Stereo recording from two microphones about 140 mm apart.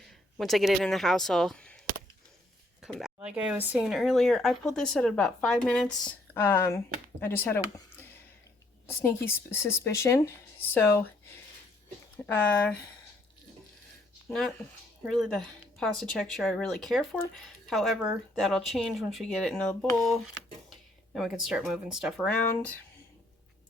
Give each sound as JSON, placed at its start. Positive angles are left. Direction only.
{"t": 0.0, "sound": "speech", "side_deg": 0}
{"t": 2.8, "sound": "speech", "side_deg": -5}
{"t": 14.3, "sound": "speech", "side_deg": 5}